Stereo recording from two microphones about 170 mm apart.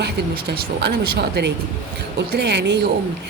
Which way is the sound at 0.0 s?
85° right.